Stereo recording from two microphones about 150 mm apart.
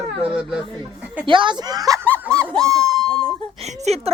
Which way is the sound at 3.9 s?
45° right (ahead or behind).